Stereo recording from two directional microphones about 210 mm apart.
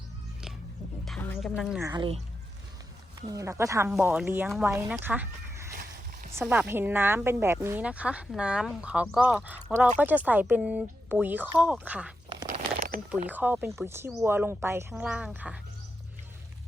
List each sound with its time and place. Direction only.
1.0 s music: 5° left (ahead or behind)
1.8 s speech: 20° right (ahead or behind)
3.2 s speech: 15° right (ahead or behind)
4.9 s chicken: 10° right (ahead or behind)
6.3 s speech: 10° right (ahead or behind)
12.5 s a sound: 40° right (ahead or behind)
13.1 s speech: 10° right (ahead or behind)